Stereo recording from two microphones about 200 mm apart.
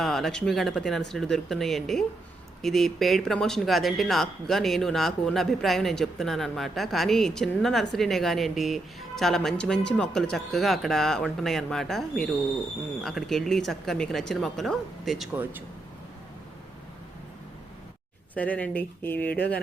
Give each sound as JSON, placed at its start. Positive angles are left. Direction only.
{"t": 0.0, "sound": "speech", "side_deg": 0}
{"t": 18.3, "sound": "speech", "side_deg": 5}